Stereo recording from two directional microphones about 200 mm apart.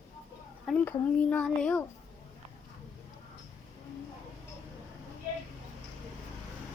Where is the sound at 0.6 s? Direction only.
10° left (ahead or behind).